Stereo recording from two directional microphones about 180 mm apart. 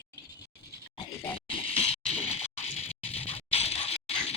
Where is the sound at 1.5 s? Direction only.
30° left (ahead or behind).